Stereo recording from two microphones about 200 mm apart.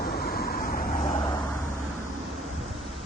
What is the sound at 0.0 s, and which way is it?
Vehicle, 50° left (ahead or behind).